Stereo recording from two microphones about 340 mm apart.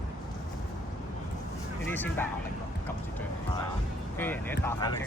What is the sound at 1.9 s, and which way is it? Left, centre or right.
Speech, centre.